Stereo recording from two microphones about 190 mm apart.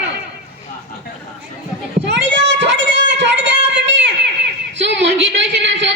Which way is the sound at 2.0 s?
65° right (ahead or behind).